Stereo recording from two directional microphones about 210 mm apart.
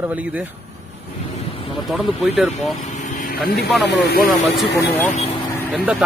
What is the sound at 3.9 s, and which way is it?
Speech, 50° left (ahead or behind).